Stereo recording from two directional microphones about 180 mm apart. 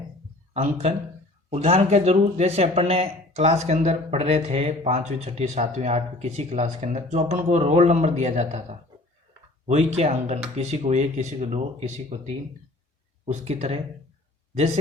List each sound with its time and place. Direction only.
0.5 s speech: 35° right (ahead or behind)
9.6 s speech: 40° right (ahead or behind)